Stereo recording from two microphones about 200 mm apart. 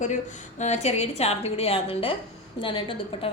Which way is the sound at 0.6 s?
35° left (ahead or behind).